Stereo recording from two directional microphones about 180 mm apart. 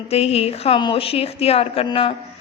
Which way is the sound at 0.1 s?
35° left (ahead or behind).